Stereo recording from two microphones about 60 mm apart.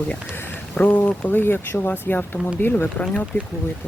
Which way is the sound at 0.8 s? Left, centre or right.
Left.